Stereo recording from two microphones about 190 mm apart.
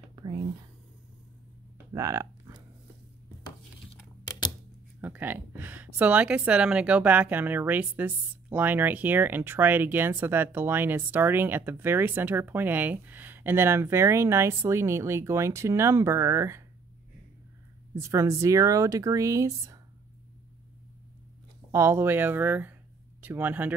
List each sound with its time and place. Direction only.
0.1 s whispering: 20° right (ahead or behind)
2.0 s a sound: 15° right (ahead or behind)
5.0 s speech: 10° right (ahead or behind)
17.9 s speech: 15° right (ahead or behind)
21.7 s speech: 15° right (ahead or behind)